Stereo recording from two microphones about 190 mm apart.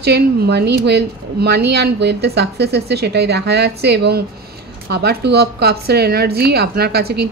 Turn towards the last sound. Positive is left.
turn(degrees=-55)  # may be behind; listen again after turning